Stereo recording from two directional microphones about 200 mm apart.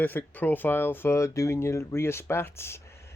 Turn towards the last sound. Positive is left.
turn(degrees=10)  # may be behind; listen again after turning